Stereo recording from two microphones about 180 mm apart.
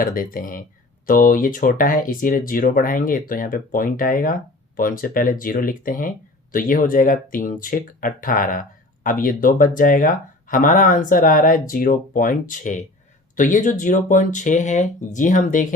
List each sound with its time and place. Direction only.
0.0 s speech: 50° left (ahead or behind)